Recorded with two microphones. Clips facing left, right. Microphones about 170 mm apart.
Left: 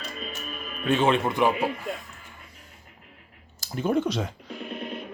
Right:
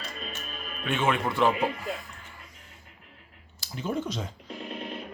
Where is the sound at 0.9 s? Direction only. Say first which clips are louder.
Left 5 dB; 35° left (ahead or behind).